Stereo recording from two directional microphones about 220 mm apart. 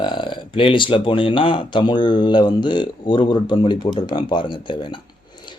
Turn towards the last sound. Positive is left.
turn(degrees=20)  # may be behind; listen again after turning